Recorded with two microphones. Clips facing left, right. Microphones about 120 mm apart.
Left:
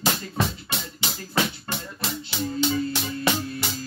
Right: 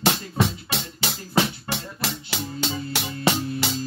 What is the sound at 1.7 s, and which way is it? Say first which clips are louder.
Music: right 1 dB; 85° right.